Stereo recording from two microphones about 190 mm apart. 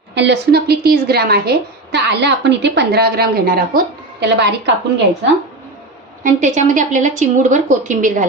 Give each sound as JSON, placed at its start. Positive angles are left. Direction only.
{"t": 0.1, "sound": "a woman's voice", "side_deg": -65}
{"t": 6.2, "sound": "a woman's voice", "side_deg": -40}